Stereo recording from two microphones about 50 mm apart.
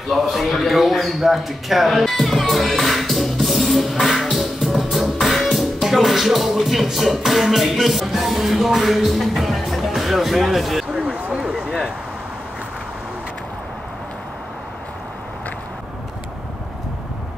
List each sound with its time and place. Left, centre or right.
0.1 s a man's voice: centre
4.8 s music: centre
11.2 s a sound: centre